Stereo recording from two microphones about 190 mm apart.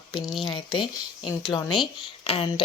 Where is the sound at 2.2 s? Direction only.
30° left (ahead or behind).